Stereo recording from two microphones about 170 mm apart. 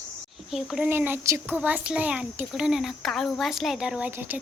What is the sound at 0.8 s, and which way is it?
A child's voice, 10° right (ahead or behind).